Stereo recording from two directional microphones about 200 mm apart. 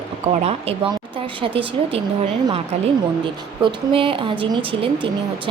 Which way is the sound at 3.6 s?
25° right (ahead or behind).